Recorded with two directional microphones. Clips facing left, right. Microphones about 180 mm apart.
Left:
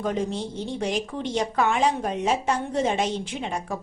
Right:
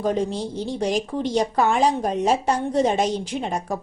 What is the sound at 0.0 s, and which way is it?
Speech, 35° right (ahead or behind).